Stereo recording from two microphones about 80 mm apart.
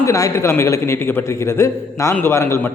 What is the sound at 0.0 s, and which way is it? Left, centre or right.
A man's voice, left.